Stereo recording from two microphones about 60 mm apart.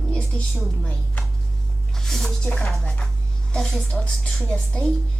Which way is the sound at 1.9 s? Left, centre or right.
Centre.